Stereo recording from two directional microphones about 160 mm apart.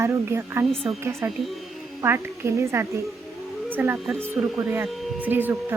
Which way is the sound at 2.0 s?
15° right (ahead or behind).